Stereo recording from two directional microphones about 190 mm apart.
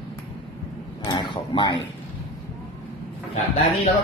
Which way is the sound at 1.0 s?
25° left (ahead or behind).